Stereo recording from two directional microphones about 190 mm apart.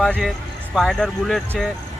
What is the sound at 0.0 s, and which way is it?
Speech, centre (ahead or behind).